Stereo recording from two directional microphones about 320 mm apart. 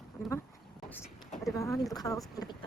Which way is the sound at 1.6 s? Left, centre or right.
Centre.